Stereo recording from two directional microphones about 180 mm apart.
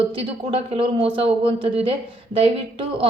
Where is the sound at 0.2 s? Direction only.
30° right (ahead or behind).